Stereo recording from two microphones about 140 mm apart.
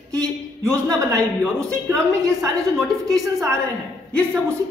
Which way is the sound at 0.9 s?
20° right (ahead or behind).